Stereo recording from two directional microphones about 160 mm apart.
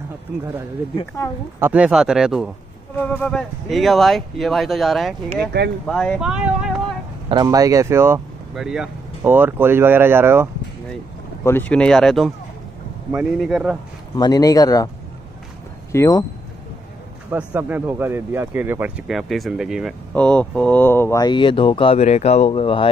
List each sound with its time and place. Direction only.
1.2 s speech: 20° left (ahead or behind)
1.6 s speech: 10° right (ahead or behind)
3.0 s speech: 10° left (ahead or behind)
5.5 s speech: 90° right
5.9 s speech: 5° left (ahead or behind)
7.4 s speech: 20° right (ahead or behind)
8.5 s speech: 5° right (ahead or behind)
11.4 s speech: 10° left (ahead or behind)
13.4 s speech: 5° right (ahead or behind)
14.1 s speech: 25° left (ahead or behind)
15.9 s speech: 20° left (ahead or behind)
17.3 s speech: 10° right (ahead or behind); by 21.2 s 15° left (ahead or behind)
21.2 s speech: 30° left (ahead or behind)